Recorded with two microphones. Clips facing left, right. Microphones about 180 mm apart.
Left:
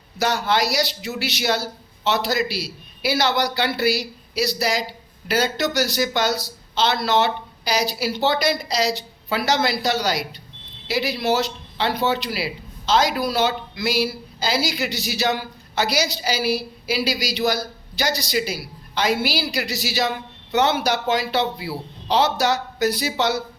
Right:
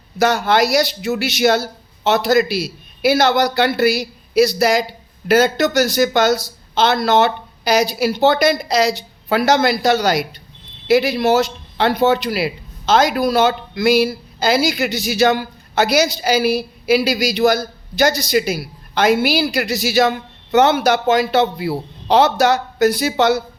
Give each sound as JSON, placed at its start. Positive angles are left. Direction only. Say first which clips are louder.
{"t": 0.2, "sound": "speech", "louder": "right 6 dB", "side_deg": -50}